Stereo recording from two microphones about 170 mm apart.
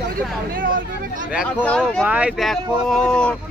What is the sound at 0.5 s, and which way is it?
Speech, 55° right (ahead or behind).